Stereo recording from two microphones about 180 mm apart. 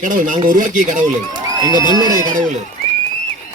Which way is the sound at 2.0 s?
45° right (ahead or behind).